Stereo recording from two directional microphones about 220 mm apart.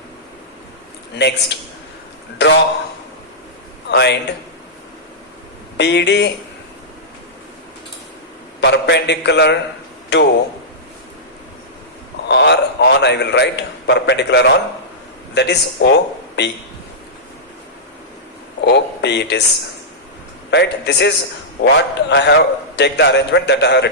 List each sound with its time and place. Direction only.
1.1 s a man's voice: 50° left (ahead or behind)
3.8 s a man's voice: 50° left (ahead or behind)
5.7 s a man's voice: 50° left (ahead or behind)
8.6 s a man's voice: 50° left (ahead or behind)
12.3 s a sound: 50° left (ahead or behind)
15.4 s speech: 50° left (ahead or behind)
18.6 s a sound: 50° left (ahead or behind)
20.5 s a man's voice: 50° left (ahead or behind)